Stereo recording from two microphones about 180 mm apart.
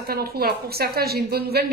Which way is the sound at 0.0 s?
60° right (ahead or behind).